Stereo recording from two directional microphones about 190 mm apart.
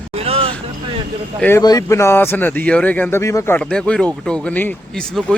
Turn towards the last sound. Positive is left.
turn(degrees=5)  # may be behind; listen again after turning